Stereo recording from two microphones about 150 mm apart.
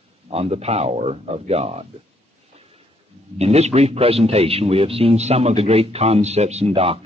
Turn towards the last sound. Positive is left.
turn(degrees=-40)  # may be behind; listen again after turning